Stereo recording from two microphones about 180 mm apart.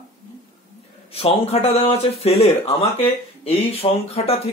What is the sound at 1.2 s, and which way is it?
Speech, 35° left (ahead or behind).